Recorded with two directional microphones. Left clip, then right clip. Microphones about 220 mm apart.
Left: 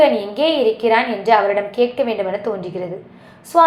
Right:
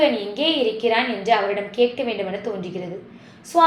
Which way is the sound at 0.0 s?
20° left (ahead or behind).